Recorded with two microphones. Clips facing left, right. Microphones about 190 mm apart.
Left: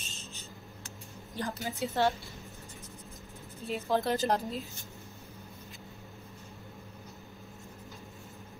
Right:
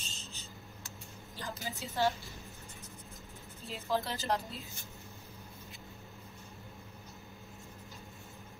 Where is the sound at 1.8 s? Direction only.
65° left (ahead or behind).